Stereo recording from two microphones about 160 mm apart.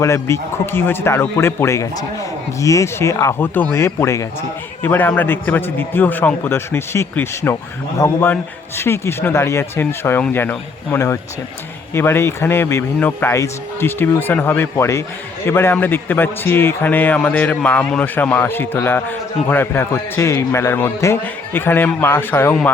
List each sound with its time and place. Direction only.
0.0 s a man's voice: 15° left (ahead or behind)